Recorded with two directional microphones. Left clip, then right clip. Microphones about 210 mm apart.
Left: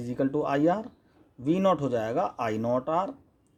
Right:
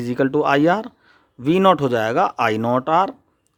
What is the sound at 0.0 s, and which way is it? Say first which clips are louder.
Speech: right 10 dB; 35° right (ahead or behind).